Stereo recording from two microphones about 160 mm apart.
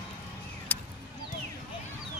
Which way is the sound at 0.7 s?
10° left (ahead or behind).